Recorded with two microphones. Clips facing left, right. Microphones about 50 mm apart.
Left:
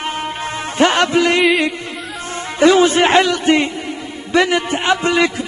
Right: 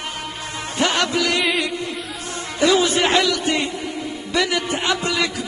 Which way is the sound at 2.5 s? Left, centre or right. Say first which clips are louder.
Left 6 dB; left.